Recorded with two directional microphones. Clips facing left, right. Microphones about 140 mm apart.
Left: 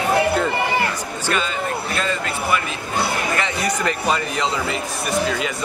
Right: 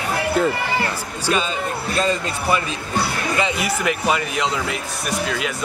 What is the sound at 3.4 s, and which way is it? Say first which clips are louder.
Speech: right 1 dB; 10° right (ahead or behind).